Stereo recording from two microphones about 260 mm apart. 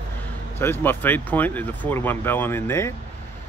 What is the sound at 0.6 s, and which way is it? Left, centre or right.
Speech, centre.